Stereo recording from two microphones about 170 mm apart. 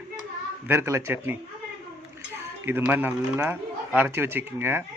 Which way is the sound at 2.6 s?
10° right (ahead or behind).